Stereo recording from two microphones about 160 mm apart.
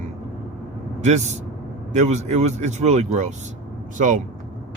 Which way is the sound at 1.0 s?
45° right (ahead or behind).